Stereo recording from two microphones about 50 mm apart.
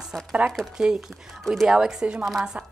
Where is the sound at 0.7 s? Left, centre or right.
Centre.